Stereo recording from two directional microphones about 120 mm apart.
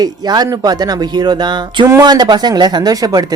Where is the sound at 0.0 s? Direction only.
35° right (ahead or behind).